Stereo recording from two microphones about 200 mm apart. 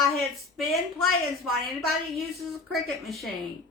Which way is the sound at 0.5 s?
Centre (ahead or behind).